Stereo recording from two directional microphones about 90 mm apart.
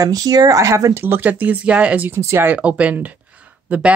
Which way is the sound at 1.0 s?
20° right (ahead or behind).